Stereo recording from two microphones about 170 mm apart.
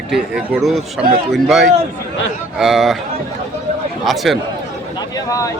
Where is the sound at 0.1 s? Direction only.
5° right (ahead or behind).